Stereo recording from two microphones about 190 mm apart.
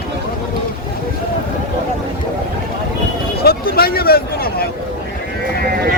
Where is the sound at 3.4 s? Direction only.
55° left (ahead or behind).